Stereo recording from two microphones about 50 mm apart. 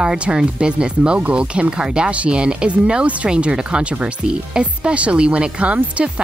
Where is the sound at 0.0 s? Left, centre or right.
Centre.